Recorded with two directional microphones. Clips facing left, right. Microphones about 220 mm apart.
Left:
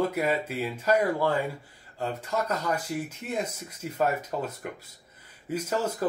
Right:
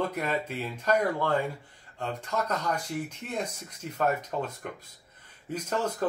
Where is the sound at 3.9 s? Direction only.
5° left (ahead or behind).